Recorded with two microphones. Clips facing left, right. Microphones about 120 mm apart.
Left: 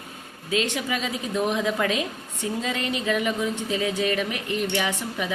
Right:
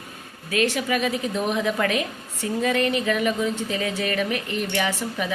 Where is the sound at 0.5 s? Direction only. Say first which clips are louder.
Right 3 dB; 20° left (ahead or behind).